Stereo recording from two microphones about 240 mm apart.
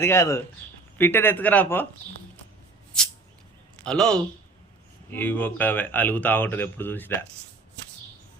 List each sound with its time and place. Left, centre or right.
0.0 s speech: centre
3.8 s speech: centre